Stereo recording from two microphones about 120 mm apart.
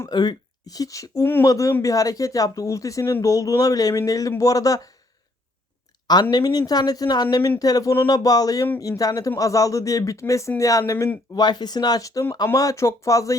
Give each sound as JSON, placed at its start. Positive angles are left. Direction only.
{"t": 0.1, "sound": "speech", "side_deg": 35}
{"t": 6.3, "sound": "speech", "side_deg": 35}